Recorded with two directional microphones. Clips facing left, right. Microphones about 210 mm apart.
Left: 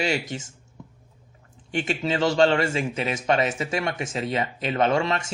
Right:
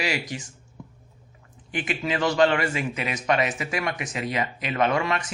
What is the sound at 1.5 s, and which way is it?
A man's voice, 30° left (ahead or behind).